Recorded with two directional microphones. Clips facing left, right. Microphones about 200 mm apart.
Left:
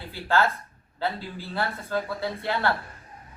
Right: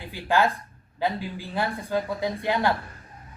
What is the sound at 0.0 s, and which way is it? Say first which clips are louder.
Speech: right 1 dB; 15° right (ahead or behind).